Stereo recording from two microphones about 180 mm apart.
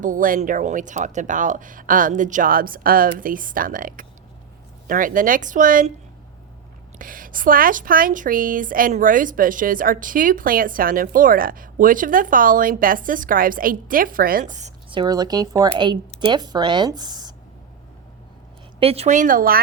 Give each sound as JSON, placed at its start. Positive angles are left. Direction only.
{"t": 0.0, "sound": "a woman's voice", "side_deg": -50}
{"t": 7.0, "sound": "a woman's voice", "side_deg": -50}
{"t": 14.8, "sound": "speech", "side_deg": -25}
{"t": 18.8, "sound": "a woman's voice", "side_deg": -35}